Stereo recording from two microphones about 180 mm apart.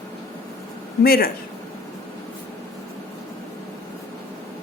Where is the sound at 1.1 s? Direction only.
55° left (ahead or behind).